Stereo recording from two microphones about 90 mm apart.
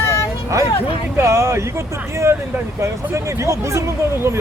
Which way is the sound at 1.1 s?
30° right (ahead or behind).